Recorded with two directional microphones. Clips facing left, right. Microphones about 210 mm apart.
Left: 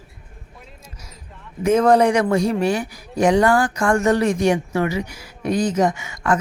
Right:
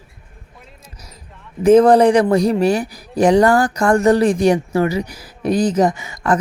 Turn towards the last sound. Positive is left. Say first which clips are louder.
# right 2 dB
turn(degrees=-35)  # may be behind; listen again after turning